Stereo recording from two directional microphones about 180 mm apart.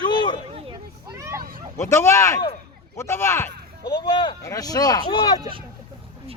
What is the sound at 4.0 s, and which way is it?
Speech, 25° left (ahead or behind).